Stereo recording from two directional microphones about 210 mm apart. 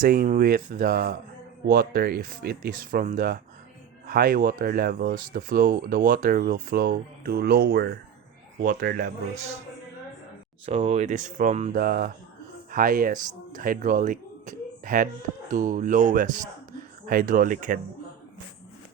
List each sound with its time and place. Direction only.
0.0 s speech: 45° right (ahead or behind)
10.7 s speech: 30° right (ahead or behind)